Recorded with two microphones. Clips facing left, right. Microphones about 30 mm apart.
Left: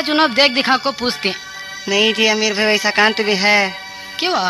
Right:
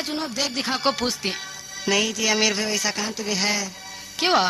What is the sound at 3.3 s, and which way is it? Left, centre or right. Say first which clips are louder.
Speech: left 10 dB; left.